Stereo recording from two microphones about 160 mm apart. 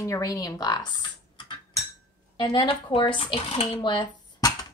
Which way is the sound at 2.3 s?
30° left (ahead or behind).